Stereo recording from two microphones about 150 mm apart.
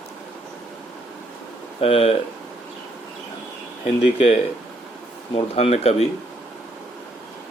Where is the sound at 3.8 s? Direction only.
45° left (ahead or behind).